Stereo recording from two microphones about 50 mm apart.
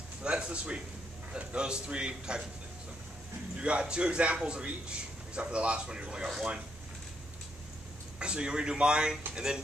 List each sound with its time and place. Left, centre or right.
0.2 s a man's voice: right
3.5 s a man's voice: right
8.2 s a man's voice: centre